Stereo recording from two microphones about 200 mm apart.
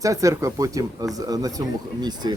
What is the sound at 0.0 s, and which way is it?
Speech, 15° right (ahead or behind).